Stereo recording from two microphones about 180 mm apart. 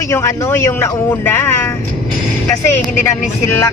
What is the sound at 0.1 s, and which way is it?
Speech, 15° left (ahead or behind).